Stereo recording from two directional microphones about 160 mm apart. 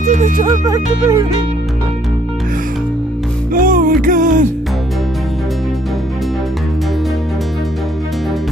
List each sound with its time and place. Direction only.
0.0 s music: 50° right (ahead or behind)
0.5 s music: 25° right (ahead or behind)
3.5 s music: 60° right (ahead or behind)